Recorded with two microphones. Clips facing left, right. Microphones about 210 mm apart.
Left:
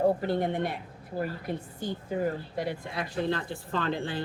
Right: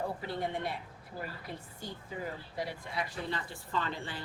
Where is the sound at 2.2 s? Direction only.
50° left (ahead or behind).